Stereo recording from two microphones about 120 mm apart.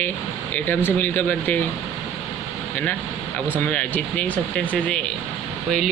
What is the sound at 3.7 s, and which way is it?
Speech, 10° left (ahead or behind).